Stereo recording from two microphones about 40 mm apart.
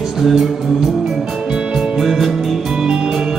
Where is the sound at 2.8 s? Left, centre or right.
Right.